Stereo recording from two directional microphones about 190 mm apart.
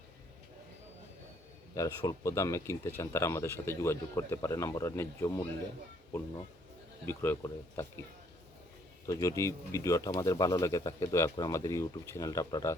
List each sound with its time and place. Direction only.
1.7 s speech: 15° left (ahead or behind)
9.0 s speech: 15° left (ahead or behind)